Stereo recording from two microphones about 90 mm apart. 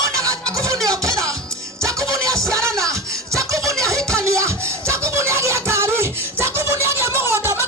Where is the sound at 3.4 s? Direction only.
35° right (ahead or behind).